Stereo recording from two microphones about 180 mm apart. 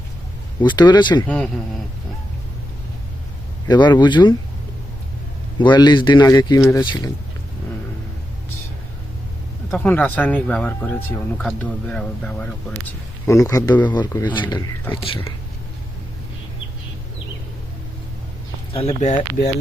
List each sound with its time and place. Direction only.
0.6 s speech: 25° left (ahead or behind)
3.7 s speech: 25° left (ahead or behind)
5.5 s speech: 25° left (ahead or behind)
9.6 s speech: 10° left (ahead or behind)
13.2 s speech: 15° left (ahead or behind)
18.7 s speech: 35° left (ahead or behind)